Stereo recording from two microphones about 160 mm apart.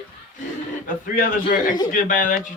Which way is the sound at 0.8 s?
55° left (ahead or behind).